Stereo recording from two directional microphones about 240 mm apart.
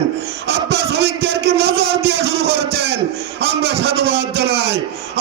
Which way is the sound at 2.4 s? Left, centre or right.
Right.